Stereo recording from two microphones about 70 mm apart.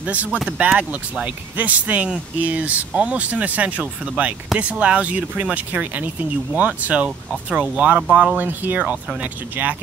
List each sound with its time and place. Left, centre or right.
0.1 s speech: right